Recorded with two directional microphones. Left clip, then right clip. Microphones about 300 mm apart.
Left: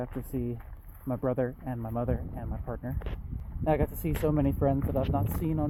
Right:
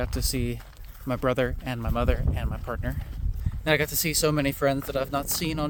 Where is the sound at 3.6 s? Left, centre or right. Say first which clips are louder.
Right 4 dB; right.